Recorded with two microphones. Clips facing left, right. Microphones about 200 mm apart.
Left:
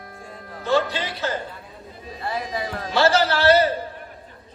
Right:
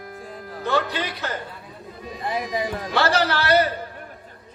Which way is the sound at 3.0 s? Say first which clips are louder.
Left 6 dB; 25° left (ahead or behind).